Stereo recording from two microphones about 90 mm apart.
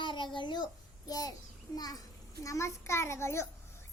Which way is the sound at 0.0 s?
60° left (ahead or behind).